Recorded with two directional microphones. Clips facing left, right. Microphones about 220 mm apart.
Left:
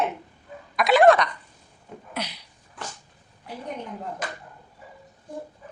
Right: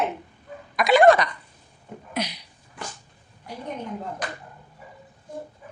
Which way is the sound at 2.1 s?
15° right (ahead or behind).